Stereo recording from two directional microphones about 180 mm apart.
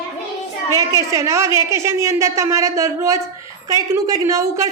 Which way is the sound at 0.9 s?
15° right (ahead or behind).